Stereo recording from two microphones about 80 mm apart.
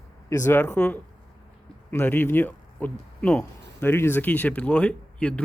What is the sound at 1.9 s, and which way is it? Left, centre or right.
Speech, left.